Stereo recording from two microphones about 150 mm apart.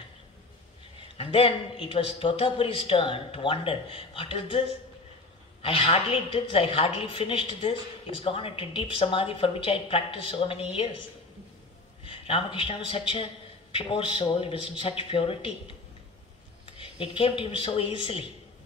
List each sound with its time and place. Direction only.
1.0 s a woman's voice: 40° left (ahead or behind)